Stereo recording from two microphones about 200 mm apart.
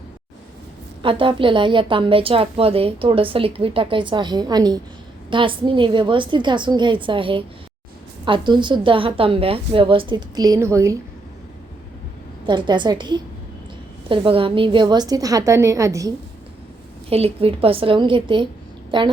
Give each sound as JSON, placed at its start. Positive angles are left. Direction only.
{"t": 1.0, "sound": "a woman's voice", "side_deg": -25}
{"t": 12.5, "sound": "a woman's voice", "side_deg": -25}
{"t": 17.1, "sound": "a woman's voice", "side_deg": -30}